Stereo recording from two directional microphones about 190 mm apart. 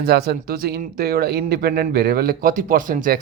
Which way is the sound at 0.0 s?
55° right (ahead or behind).